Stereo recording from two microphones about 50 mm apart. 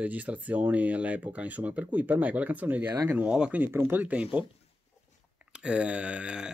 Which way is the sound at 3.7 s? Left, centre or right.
Right.